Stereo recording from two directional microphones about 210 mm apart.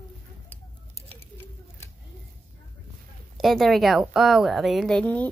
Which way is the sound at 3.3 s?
Centre (ahead or behind).